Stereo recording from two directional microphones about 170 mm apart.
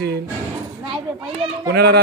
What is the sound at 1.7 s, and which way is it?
Speech, 70° right (ahead or behind).